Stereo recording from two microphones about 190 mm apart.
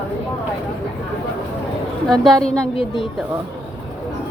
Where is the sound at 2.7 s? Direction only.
30° left (ahead or behind).